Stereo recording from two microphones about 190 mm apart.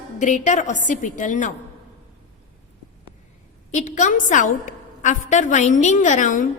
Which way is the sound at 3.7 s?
40° left (ahead or behind).